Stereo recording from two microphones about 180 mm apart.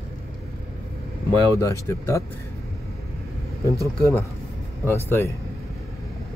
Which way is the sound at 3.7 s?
15° right (ahead or behind).